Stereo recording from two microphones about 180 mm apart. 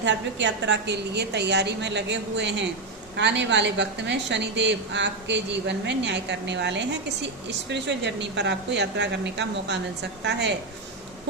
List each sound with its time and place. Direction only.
0.0 s a woman's voice: 80° right